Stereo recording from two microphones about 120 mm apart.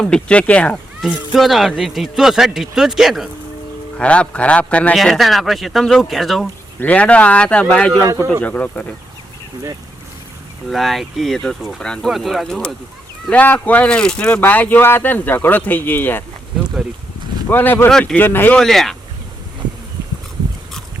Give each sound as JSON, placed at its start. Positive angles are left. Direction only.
{"t": 0.0, "sound": "speech", "side_deg": 10}
{"t": 1.3, "sound": "speech", "side_deg": 0}
{"t": 3.9, "sound": "speech", "side_deg": 10}
{"t": 4.9, "sound": "speech", "side_deg": 0}
{"t": 6.7, "sound": "speech", "side_deg": 10}
{"t": 8.0, "sound": "speech", "side_deg": -25}
{"t": 8.4, "sound": "speech", "side_deg": 15}
{"t": 10.7, "sound": "speech", "side_deg": 0}
{"t": 17.5, "sound": "speech", "side_deg": 15}
{"t": 18.6, "sound": "speech", "side_deg": 0}